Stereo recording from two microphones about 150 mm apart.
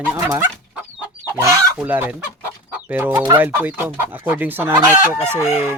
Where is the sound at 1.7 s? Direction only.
10° right (ahead or behind).